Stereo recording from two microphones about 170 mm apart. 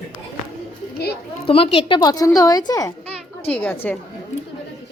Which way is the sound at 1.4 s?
35° left (ahead or behind).